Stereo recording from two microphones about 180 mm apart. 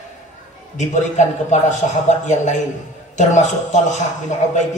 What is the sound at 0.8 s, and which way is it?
A man's voice, 40° left (ahead or behind).